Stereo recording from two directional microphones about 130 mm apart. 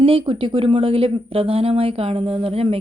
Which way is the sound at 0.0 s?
45° right (ahead or behind).